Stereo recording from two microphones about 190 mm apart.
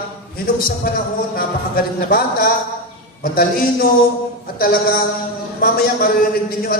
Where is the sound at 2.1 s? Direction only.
50° left (ahead or behind).